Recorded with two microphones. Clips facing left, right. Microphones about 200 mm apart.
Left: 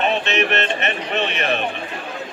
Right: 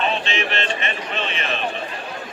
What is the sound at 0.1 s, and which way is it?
Music, 60° left (ahead or behind).